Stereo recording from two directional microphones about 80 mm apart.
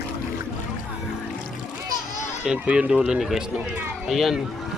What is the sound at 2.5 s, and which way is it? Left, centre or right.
Speech, centre.